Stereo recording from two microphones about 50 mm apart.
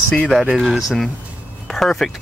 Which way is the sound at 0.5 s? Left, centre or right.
Centre.